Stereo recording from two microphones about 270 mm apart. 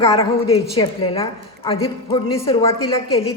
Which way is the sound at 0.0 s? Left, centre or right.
Left.